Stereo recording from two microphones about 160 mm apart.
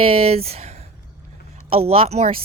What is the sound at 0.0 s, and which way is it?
Speech, 35° right (ahead or behind).